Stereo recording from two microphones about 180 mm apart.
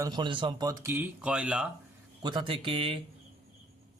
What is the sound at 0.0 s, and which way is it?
Speech, 25° right (ahead or behind).